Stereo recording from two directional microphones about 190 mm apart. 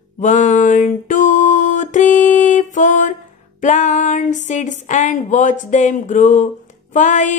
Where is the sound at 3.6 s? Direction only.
40° left (ahead or behind).